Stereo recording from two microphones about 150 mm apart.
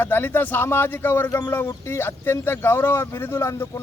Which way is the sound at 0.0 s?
15° left (ahead or behind).